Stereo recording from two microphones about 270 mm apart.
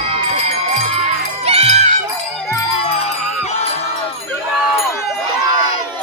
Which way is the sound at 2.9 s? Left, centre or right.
Left.